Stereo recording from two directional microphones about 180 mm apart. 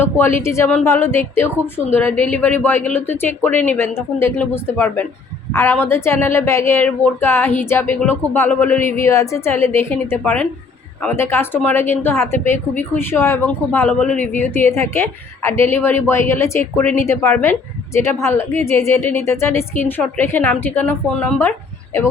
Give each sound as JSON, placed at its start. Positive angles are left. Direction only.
{"t": 0.0, "sound": "speech", "side_deg": 10}